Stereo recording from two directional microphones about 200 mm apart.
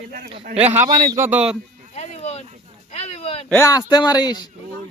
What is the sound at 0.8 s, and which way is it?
Speech, 20° right (ahead or behind).